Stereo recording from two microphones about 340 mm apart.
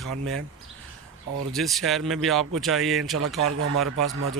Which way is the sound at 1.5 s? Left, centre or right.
Centre.